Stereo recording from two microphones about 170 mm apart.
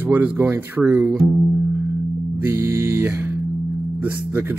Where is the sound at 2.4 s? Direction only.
15° right (ahead or behind).